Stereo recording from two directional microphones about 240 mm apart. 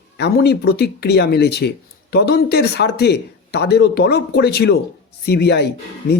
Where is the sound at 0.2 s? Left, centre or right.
Left.